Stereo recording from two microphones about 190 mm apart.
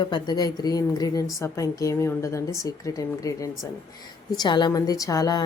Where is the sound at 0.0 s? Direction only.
20° left (ahead or behind).